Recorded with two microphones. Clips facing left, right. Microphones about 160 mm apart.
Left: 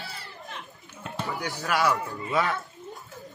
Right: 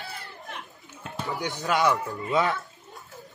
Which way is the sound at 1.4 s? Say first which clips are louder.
Right 2 dB; 20° right (ahead or behind).